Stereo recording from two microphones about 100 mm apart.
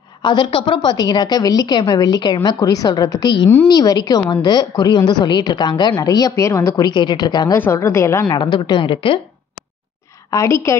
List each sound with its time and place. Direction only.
0.2 s a woman's voice: 55° left (ahead or behind); by 6.7 s 30° left (ahead or behind)
6.8 s a woman's voice: 50° left (ahead or behind)
7.5 s a woman's voice: 25° left (ahead or behind)
8.3 s a woman's voice: 45° left (ahead or behind)
10.3 s a woman's voice: 30° left (ahead or behind)